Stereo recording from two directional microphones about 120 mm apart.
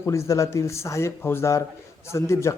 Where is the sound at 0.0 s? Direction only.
25° left (ahead or behind).